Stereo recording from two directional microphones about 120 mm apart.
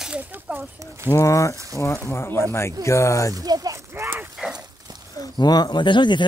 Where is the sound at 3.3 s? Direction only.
30° right (ahead or behind).